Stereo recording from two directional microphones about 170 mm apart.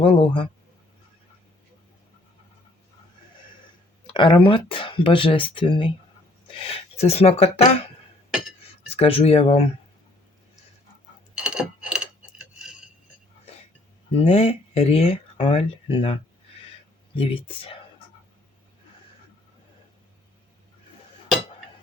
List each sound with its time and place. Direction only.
0.0 s speech: 30° left (ahead or behind)
4.0 s speech: 30° left (ahead or behind)
8.9 s speech: 35° left (ahead or behind)
11.3 s a sound: 5° right (ahead or behind)
14.3 s speech: 40° left (ahead or behind)
17.2 s speech: 35° left (ahead or behind)